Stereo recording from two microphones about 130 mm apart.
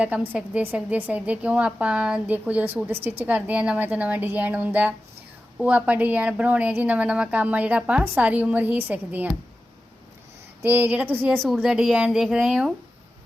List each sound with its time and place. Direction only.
0.0 s a woman's voice: 10° right (ahead or behind)
10.6 s a woman's voice: 15° right (ahead or behind)
11.3 s speech: 5° left (ahead or behind)